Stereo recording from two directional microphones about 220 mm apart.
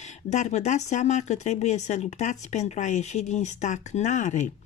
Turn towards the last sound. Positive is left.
turn(degrees=35)  # may be behind; listen again after turning